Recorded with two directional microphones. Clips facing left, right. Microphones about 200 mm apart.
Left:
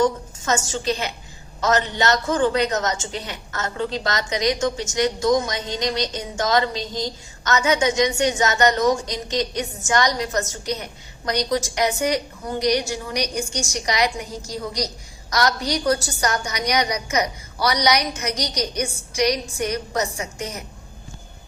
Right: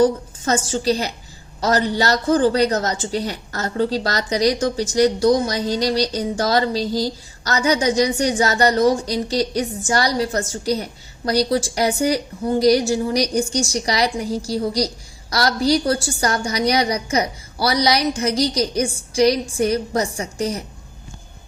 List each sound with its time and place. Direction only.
0.0 s a woman's voice: 35° right (ahead or behind)